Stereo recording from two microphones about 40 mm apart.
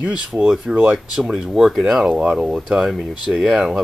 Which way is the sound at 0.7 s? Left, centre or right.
Right.